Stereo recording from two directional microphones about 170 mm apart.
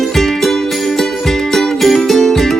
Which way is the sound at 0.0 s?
Centre (ahead or behind).